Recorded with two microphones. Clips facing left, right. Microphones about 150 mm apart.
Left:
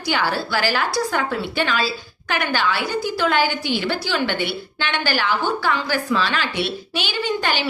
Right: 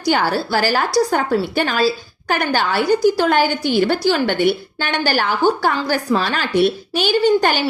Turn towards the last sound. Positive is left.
turn(degrees=-45)  # may be behind; listen again after turning